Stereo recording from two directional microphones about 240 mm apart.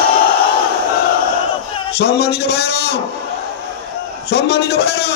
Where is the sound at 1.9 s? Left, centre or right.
Left.